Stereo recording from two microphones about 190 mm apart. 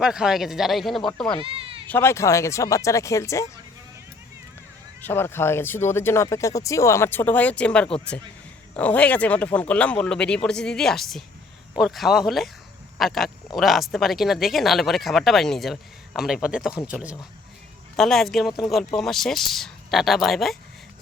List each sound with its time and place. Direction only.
0.0 s speech: 5° right (ahead or behind)
1.4 s bleat: 30° right (ahead or behind)
1.9 s speech: 15° left (ahead or behind)
5.0 s speech: 10° left (ahead or behind)